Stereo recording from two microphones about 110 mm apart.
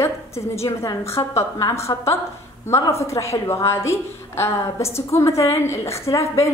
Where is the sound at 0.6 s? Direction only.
25° left (ahead or behind).